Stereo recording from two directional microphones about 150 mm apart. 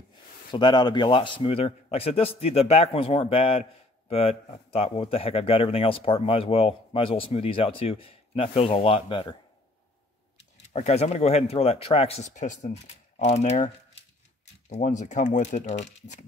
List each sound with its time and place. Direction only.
0.5 s speech: 30° left (ahead or behind)
10.7 s speech: 45° left (ahead or behind)
14.7 s speech: 55° left (ahead or behind)